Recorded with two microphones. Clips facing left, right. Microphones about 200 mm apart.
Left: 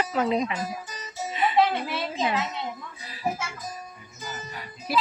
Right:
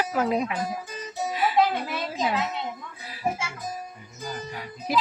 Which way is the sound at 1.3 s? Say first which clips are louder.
Left 1 dB; 5° right (ahead or behind).